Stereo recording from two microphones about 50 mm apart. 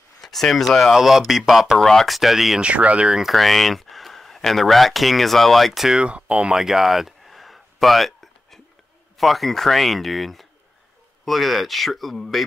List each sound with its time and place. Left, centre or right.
0.2 s a sound: centre
0.7 s speech: centre
2.6 s speech: right
3.2 s speech: centre
5.9 s speech: right
6.3 s a sound: centre
9.2 s speech: centre